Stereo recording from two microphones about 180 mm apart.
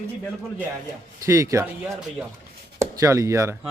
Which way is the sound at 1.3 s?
15° right (ahead or behind).